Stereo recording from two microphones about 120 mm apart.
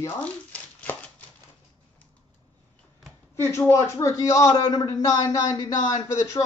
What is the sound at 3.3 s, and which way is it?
A man's voice, 20° left (ahead or behind).